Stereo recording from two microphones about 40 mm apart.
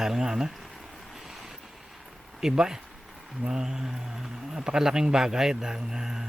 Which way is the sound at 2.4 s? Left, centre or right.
Centre.